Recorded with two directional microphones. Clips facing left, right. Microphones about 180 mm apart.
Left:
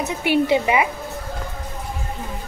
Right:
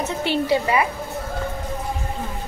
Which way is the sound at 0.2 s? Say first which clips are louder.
Left 3 dB; 15° left (ahead or behind).